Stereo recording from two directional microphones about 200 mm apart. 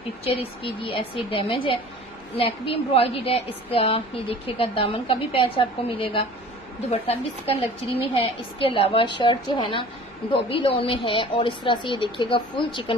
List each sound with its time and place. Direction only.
0.2 s a woman's voice: 30° left (ahead or behind)